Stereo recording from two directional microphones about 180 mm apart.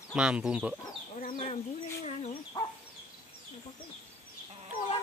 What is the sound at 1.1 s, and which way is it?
Fowl, 45° left (ahead or behind).